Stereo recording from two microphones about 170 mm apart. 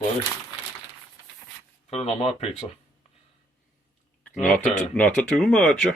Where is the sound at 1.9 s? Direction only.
35° left (ahead or behind).